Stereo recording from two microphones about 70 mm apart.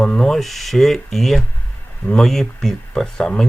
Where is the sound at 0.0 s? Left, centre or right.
Centre.